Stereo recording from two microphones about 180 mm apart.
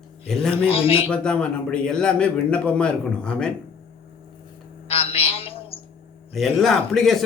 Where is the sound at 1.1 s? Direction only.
5° left (ahead or behind).